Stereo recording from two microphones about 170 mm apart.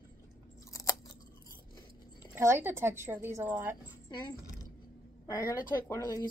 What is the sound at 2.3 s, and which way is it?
A woman's voice, 15° right (ahead or behind).